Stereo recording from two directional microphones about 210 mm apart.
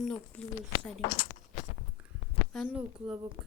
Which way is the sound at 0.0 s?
5° left (ahead or behind).